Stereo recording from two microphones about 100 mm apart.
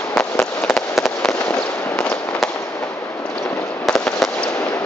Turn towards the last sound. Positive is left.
turn(degrees=5)  # may be behind; listen again after turning